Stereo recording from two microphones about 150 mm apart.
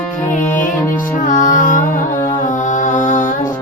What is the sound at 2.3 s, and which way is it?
Mantra, 55° left (ahead or behind).